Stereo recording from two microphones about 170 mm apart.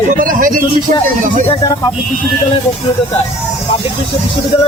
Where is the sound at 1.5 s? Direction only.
25° left (ahead or behind).